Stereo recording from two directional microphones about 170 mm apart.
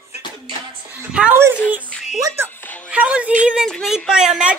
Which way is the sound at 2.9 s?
10° right (ahead or behind).